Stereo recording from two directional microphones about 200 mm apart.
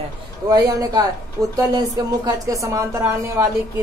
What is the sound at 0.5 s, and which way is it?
Speech, 20° right (ahead or behind).